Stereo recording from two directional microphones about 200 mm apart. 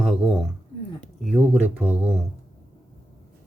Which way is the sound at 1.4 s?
10° right (ahead or behind).